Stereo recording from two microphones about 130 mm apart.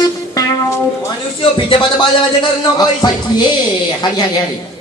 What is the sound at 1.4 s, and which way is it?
Speech, 40° left (ahead or behind).